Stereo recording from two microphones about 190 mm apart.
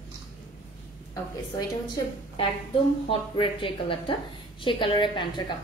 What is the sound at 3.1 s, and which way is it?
A woman's voice, 25° left (ahead or behind).